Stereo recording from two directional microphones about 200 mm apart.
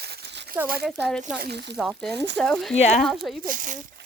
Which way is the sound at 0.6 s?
50° right (ahead or behind).